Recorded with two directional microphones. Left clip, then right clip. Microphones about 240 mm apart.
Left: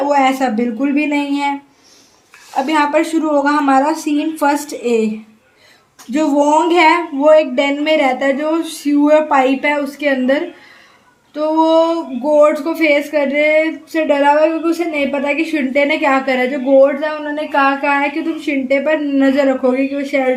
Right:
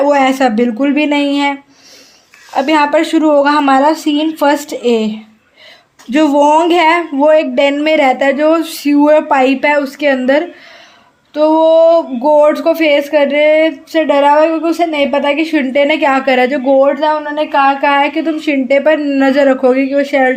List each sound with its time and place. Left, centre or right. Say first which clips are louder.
0.0 s speech: right 4 dB; right
2.6 s speech: right 4 dB; right